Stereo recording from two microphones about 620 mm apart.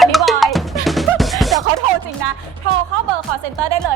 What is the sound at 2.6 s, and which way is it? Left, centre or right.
Speech, right.